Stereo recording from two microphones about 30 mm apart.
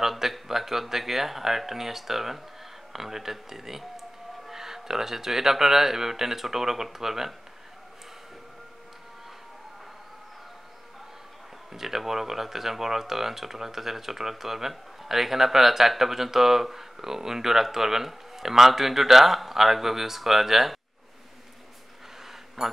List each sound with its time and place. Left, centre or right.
0.5 s speech: centre
11.7 s speech: centre
22.6 s a man's voice: right